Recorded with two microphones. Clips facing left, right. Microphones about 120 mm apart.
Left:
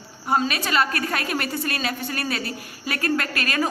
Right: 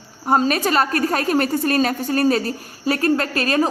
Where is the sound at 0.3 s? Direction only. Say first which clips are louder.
Right 5 dB; 40° right (ahead or behind).